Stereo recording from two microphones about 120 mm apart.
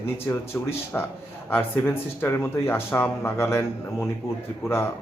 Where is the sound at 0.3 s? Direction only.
20° left (ahead or behind).